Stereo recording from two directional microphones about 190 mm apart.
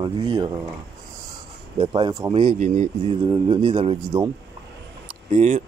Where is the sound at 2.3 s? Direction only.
35° right (ahead or behind).